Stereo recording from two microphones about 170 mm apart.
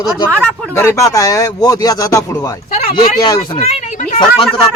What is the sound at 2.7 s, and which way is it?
Speech, 35° left (ahead or behind).